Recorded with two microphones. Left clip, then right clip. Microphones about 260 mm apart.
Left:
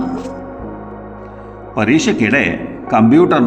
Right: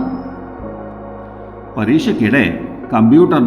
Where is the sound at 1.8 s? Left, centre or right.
Centre.